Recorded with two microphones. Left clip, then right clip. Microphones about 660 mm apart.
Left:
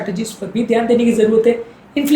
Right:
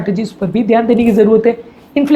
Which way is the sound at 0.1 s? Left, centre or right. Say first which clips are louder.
Right 6 dB; right.